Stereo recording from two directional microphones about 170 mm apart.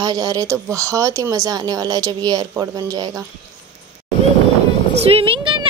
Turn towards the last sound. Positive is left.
turn(degrees=-30)  # may be behind; listen again after turning